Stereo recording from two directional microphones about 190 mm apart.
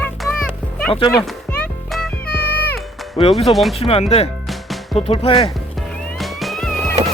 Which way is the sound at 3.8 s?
30° left (ahead or behind).